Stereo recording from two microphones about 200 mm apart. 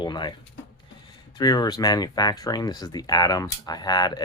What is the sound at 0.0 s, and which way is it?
Pigeon, 25° left (ahead or behind).